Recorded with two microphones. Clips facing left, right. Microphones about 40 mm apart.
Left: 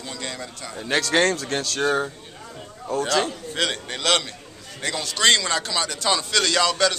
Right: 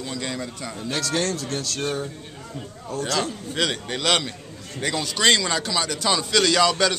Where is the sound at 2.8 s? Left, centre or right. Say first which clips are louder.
Left 4 dB; left.